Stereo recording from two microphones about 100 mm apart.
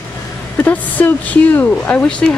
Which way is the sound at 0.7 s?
15° left (ahead or behind).